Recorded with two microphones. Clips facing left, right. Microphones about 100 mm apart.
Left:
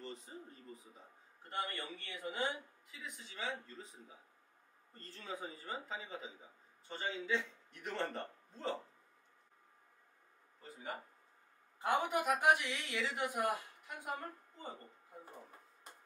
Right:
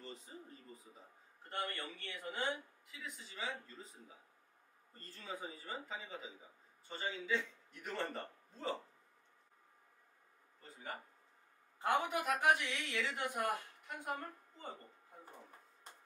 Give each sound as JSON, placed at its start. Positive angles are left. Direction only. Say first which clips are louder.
{"t": 0.0, "sound": "a sound", "louder": "left 3 dB", "side_deg": 0}
{"t": 1.5, "sound": "a woman's voice", "louder": "left 1 dB", "side_deg": 10}
{"t": 2.4, "sound": "a man's voice", "louder": "right 1 dB", "side_deg": 5}
{"t": 4.9, "sound": "a man's voice", "louder": "left 1 dB", "side_deg": -5}
{"t": 11.8, "sound": "a woman's voice", "louder": "left 1 dB", "side_deg": 10}